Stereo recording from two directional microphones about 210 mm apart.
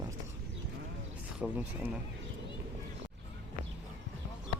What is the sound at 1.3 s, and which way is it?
Speech, 5° right (ahead or behind).